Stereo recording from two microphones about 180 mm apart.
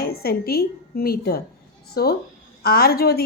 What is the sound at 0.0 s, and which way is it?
A woman's voice, 60° left (ahead or behind).